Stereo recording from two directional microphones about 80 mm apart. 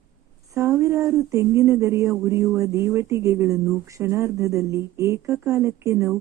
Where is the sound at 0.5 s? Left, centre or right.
Right.